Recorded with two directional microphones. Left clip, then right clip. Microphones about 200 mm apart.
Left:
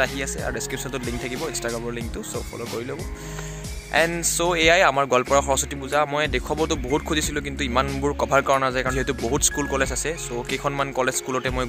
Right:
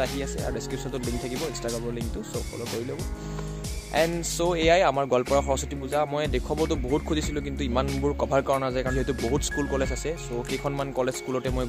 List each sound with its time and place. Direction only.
0.0 s speech: 5° left (ahead or behind)
3.9 s speech: 5° left (ahead or behind)